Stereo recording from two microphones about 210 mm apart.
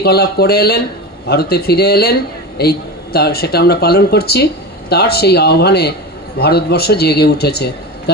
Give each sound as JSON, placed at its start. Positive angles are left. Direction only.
{"t": 0.0, "sound": "a man's voice", "side_deg": 50}